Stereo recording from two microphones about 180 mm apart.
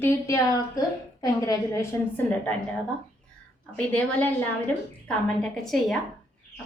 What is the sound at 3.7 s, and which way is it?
A woman's voice, 10° left (ahead or behind).